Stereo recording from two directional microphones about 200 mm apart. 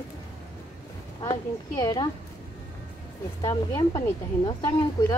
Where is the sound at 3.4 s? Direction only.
20° left (ahead or behind).